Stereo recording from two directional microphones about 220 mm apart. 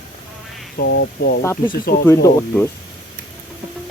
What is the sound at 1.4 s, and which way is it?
Speech, 10° left (ahead or behind).